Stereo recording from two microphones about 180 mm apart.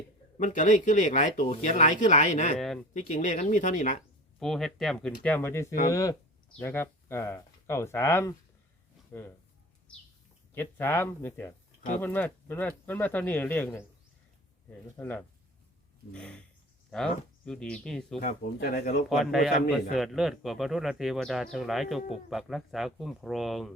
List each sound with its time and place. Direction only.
0.3 s speech: 45° left (ahead or behind)
2.6 s speech: centre (ahead or behind)
2.9 s speech: 40° left (ahead or behind)
4.4 s speech: centre (ahead or behind)
10.5 s speech: 10° left (ahead or behind)
14.9 s speech: 10° left (ahead or behind)
18.2 s speech: 50° left (ahead or behind)
19.0 s speech: centre (ahead or behind)